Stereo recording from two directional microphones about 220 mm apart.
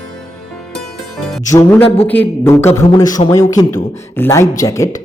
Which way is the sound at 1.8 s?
25° left (ahead or behind).